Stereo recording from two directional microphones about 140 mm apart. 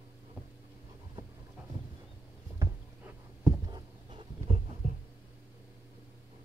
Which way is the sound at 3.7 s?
40° right (ahead or behind).